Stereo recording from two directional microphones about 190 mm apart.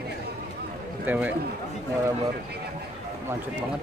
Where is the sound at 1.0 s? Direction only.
5° right (ahead or behind).